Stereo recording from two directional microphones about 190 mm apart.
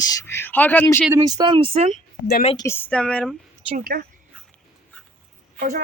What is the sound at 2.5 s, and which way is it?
Speech, 15° left (ahead or behind).